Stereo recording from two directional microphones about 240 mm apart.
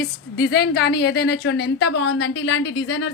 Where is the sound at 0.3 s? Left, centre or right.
Left.